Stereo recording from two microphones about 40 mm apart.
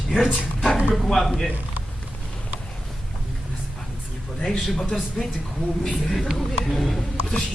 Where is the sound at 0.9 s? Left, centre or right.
Centre.